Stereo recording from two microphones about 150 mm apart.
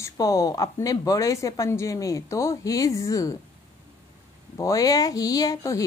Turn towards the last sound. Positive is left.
turn(degrees=25)  # may be behind; listen again after turning